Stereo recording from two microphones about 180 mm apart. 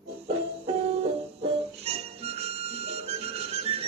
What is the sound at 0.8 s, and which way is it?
Music, 35° right (ahead or behind).